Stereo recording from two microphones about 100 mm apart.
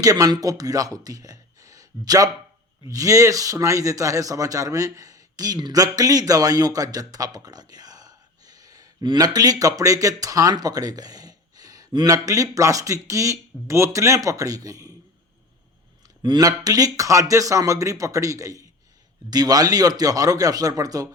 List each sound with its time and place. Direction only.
0.0 s a man's voice: 35° right (ahead or behind)
16.2 s a man's voice: 45° right (ahead or behind)